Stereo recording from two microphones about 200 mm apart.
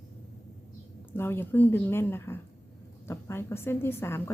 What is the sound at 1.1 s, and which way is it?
A woman's voice, 10° left (ahead or behind).